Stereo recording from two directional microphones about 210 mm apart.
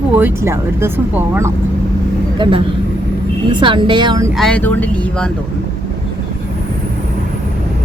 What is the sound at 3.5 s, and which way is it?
Speech, 20° right (ahead or behind).